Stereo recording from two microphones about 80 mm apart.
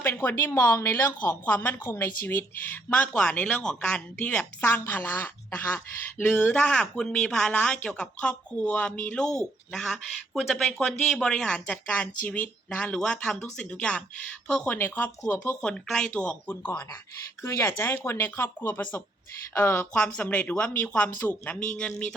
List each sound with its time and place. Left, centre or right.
0.0 s a woman's voice: left; by 14.8 s centre
14.8 s a woman's voice: left
15.6 s speech: centre
16.6 s a woman's voice: left; by 22.1 s centre